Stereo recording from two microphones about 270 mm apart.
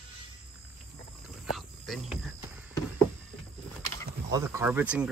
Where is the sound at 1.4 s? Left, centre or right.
Centre.